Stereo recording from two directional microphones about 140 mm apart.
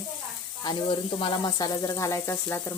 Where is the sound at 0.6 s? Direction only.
35° left (ahead or behind).